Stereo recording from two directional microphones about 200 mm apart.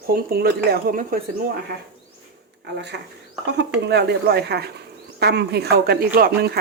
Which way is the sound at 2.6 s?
60° right (ahead or behind).